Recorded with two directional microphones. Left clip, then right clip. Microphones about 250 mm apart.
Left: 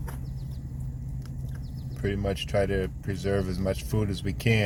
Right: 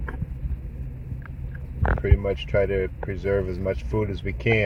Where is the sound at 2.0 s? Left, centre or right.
Centre.